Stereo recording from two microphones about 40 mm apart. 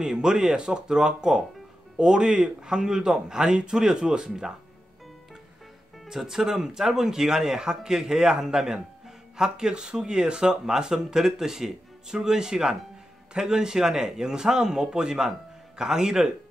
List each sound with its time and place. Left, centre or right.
0.0 s a man's voice: centre
6.0 s speech: centre